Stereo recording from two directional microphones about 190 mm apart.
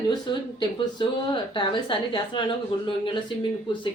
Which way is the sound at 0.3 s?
25° left (ahead or behind).